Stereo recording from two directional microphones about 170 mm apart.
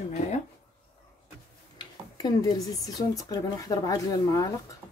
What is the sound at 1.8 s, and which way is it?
Speech, 25° left (ahead or behind).